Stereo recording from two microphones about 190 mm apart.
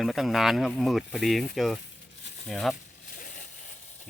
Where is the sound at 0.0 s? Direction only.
Centre (ahead or behind).